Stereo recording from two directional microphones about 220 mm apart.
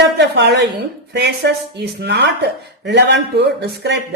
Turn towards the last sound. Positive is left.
turn(degrees=-50)  # may be behind; listen again after turning